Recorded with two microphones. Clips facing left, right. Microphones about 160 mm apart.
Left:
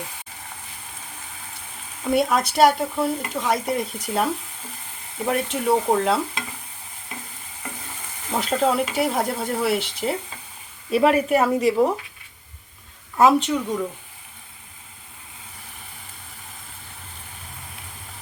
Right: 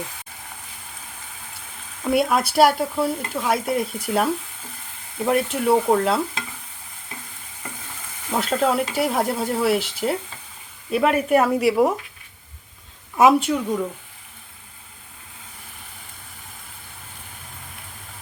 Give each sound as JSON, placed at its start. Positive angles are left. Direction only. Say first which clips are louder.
{"t": 2.0, "sound": "speech", "louder": "right 1 dB", "side_deg": -5}
{"t": 8.3, "sound": "speech", "louder": "even", "side_deg": 0}
{"t": 13.1, "sound": "a woman's voice", "louder": "right 1 dB", "side_deg": -15}